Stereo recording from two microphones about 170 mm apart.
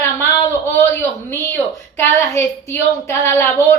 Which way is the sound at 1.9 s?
15° left (ahead or behind).